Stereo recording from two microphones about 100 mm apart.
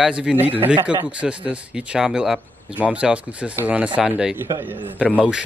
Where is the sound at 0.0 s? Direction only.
10° right (ahead or behind).